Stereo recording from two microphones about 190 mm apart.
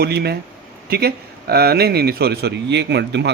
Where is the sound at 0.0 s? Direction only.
55° right (ahead or behind).